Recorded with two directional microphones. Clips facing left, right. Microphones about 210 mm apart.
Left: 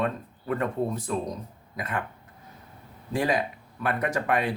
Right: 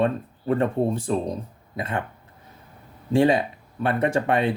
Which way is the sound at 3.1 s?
25° right (ahead or behind).